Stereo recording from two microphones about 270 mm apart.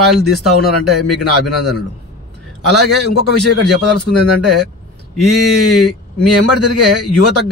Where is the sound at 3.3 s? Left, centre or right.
Left.